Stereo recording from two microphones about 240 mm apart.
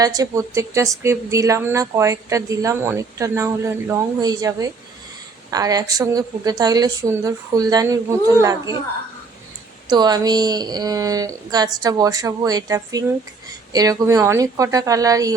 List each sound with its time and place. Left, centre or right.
0.0 s a woman's voice: centre
9.8 s a woman's voice: centre